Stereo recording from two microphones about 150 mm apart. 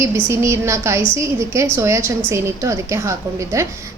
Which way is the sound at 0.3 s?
20° right (ahead or behind).